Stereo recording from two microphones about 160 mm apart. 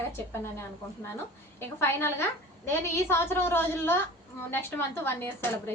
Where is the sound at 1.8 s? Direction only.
15° left (ahead or behind).